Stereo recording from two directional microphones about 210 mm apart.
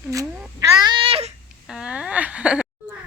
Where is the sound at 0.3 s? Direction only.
5° right (ahead or behind).